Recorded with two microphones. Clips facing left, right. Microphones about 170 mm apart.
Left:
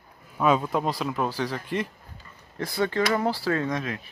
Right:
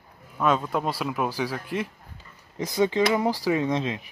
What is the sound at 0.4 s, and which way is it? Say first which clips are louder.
Speech: left 1 dB; 5° left (ahead or behind).